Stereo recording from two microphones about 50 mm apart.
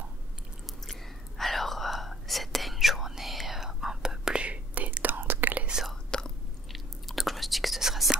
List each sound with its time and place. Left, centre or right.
1.4 s whispering: centre; by 5.7 s right
6.0 s chewing: centre
6.7 s whispering: centre